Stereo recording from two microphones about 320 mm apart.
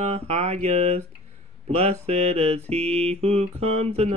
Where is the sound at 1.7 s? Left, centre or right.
Centre.